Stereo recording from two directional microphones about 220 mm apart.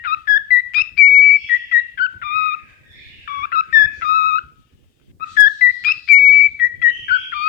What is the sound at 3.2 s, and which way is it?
Music, 40° left (ahead or behind).